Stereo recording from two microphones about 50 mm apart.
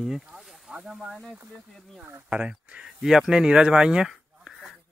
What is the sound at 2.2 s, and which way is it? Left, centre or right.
Speech, right.